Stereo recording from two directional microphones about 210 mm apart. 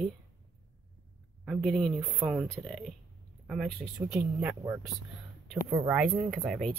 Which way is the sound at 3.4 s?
Centre (ahead or behind).